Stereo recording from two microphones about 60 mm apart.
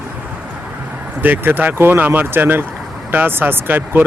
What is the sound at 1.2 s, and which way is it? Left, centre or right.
Speech, right.